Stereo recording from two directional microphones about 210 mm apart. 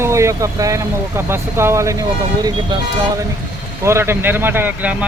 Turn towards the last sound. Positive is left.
turn(degrees=-10)  # may be behind; listen again after turning